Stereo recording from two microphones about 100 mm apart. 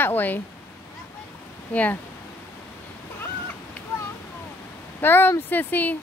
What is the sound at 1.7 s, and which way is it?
Speech, 15° left (ahead or behind).